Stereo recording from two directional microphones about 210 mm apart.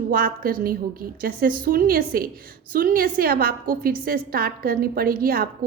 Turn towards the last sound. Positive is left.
turn(degrees=-45)  # may be behind; listen again after turning